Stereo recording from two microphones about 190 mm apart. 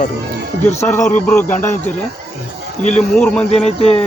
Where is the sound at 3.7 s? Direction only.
35° left (ahead or behind).